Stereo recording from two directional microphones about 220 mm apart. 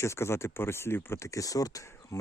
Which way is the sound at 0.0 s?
10° left (ahead or behind).